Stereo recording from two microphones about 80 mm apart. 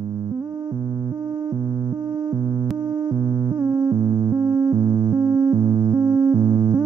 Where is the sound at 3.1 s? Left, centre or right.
Right.